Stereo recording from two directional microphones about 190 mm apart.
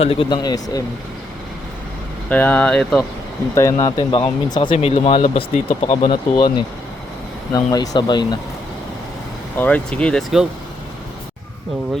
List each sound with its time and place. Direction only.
0.0 s speech: 30° left (ahead or behind)
2.3 s speech: 10° left (ahead or behind)
3.5 s speech: 15° left (ahead or behind)
9.6 s speech: 10° left (ahead or behind)